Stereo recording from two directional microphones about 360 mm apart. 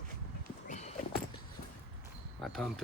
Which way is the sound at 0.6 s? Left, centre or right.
Left.